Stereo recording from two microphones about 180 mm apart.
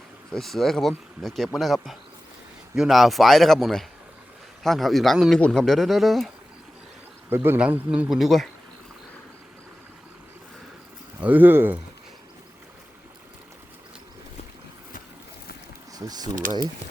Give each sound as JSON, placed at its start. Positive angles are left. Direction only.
{"t": 0.3, "sound": "speech", "side_deg": 0}
{"t": 7.3, "sound": "speech", "side_deg": -15}
{"t": 11.2, "sound": "speech", "side_deg": -10}
{"t": 15.9, "sound": "speech", "side_deg": -20}